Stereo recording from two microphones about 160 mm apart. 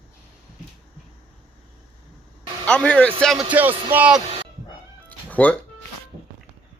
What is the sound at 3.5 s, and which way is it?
Speech, 10° right (ahead or behind).